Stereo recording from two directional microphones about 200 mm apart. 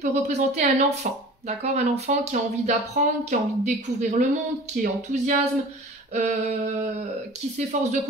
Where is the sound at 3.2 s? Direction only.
35° right (ahead or behind).